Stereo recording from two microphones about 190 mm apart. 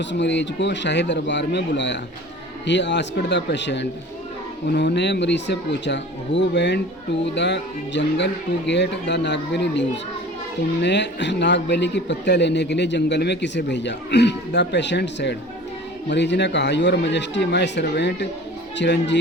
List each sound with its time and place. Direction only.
0.0 s a man's voice: 70° left (ahead or behind)